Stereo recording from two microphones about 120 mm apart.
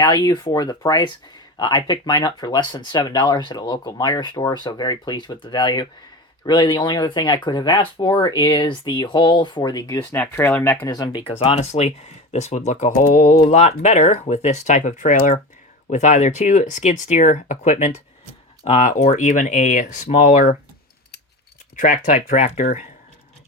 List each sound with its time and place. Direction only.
0.0 s speech: 35° left (ahead or behind)
10.0 s speech: 20° left (ahead or behind)
10.8 s speech: 35° left (ahead or behind)
11.3 s speech: 55° left (ahead or behind); by 15.4 s 90° left
15.9 s speech: 80° left
21.8 s speech: 90° left